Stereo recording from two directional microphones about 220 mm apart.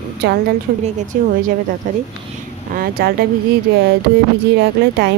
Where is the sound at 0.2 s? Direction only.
50° right (ahead or behind).